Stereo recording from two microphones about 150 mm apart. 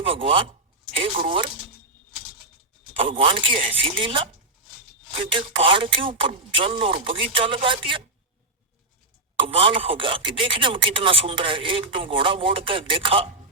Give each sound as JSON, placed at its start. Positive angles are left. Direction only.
{"t": 0.0, "sound": "speech", "side_deg": -35}
{"t": 3.0, "sound": "speech", "side_deg": -35}
{"t": 5.3, "sound": "speech", "side_deg": -35}
{"t": 9.4, "sound": "speech", "side_deg": -35}